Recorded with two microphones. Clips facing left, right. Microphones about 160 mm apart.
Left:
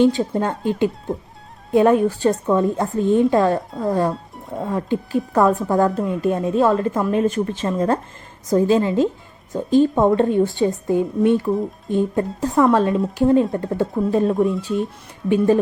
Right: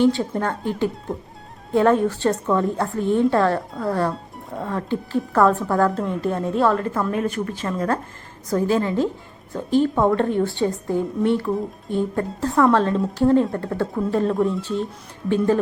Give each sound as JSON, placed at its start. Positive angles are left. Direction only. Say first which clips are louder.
{"t": 0.3, "sound": "a woman's voice", "louder": "left 3 dB", "side_deg": 15}
{"t": 1.1, "sound": "music", "louder": "left 3 dB", "side_deg": 0}
{"t": 1.7, "sound": "a woman's voice", "louder": "left 2 dB", "side_deg": 15}